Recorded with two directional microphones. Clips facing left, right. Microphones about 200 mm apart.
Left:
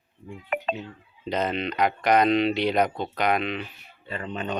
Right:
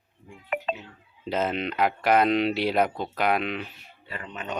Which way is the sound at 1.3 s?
5° right (ahead or behind).